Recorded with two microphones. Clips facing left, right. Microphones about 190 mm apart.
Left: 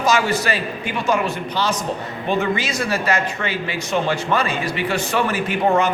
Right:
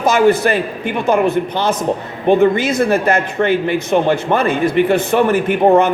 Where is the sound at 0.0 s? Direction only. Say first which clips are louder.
Right 7 dB; 55° right (ahead or behind).